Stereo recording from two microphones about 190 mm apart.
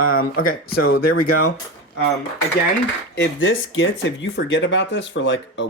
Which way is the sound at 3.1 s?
75° left (ahead or behind).